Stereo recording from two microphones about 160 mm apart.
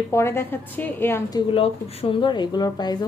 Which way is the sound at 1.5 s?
35° left (ahead or behind).